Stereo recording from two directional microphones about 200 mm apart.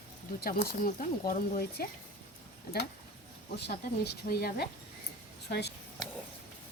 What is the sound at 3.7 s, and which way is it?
Speech, 50° left (ahead or behind).